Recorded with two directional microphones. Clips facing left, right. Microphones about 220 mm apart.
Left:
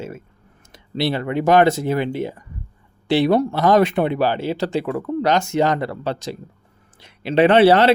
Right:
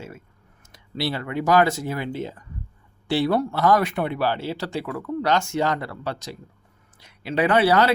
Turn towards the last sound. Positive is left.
turn(degrees=30)  # may be behind; listen again after turning